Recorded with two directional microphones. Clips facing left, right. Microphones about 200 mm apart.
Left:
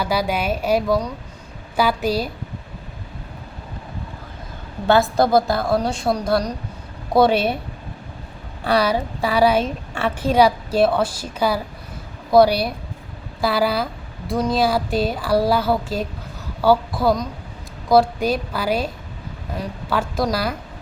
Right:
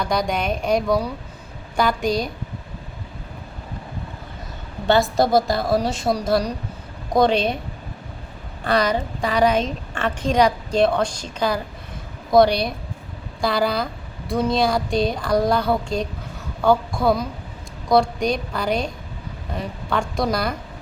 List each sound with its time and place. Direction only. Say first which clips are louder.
0.0 s speech: left 1 dB; 5° left (ahead or behind)
4.9 s speech: left 1 dB; centre (ahead or behind)
7.1 s a woman's voice: left 2 dB; 5° left (ahead or behind)
8.6 s a woman's voice: left 1 dB; 10° left (ahead or behind)